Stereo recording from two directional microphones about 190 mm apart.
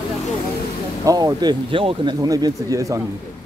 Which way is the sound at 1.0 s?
20° right (ahead or behind).